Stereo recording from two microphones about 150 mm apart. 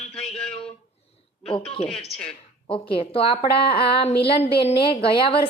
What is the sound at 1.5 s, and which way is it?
Speech, 35° left (ahead or behind).